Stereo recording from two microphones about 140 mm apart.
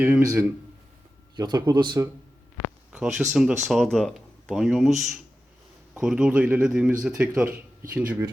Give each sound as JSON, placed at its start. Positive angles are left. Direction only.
{"t": 0.0, "sound": "speech", "side_deg": -20}
{"t": 2.9, "sound": "speech", "side_deg": -5}
{"t": 5.9, "sound": "speech", "side_deg": -5}